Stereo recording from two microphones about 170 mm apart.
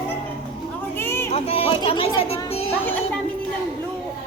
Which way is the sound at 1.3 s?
35° left (ahead or behind).